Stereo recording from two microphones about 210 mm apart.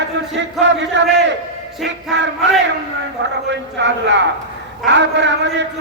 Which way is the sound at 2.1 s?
55° right (ahead or behind).